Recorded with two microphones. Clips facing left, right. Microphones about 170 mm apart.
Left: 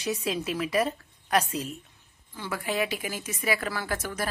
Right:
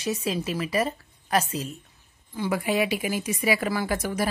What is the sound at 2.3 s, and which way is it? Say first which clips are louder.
A woman's voice: right 6 dB; 15° right (ahead or behind).